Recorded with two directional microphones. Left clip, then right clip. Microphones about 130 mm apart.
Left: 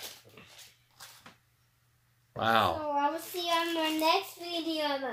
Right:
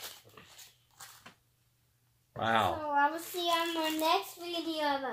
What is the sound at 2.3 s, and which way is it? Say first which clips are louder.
Speech: left 3 dB; 15° left (ahead or behind).